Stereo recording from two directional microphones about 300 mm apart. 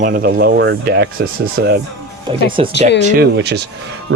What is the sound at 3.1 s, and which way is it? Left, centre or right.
Speech, right.